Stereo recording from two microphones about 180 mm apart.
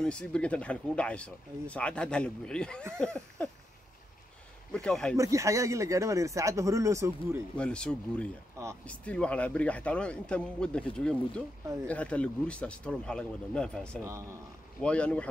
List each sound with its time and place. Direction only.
0.0 s speech: 5° left (ahead or behind)
4.7 s speech: 5° left (ahead or behind)
5.1 s speech: 15° right (ahead or behind)
7.5 s a man's voice: 5° left (ahead or behind)
11.6 s speech: 15° right (ahead or behind)
11.9 s a man's voice: 5° left (ahead or behind)
14.0 s speech: 15° right (ahead or behind)
14.8 s a man's voice: 5° left (ahead or behind)